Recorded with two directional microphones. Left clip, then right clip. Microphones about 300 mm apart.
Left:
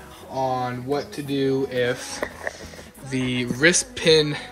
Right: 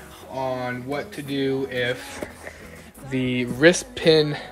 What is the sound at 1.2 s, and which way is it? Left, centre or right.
Speech, centre.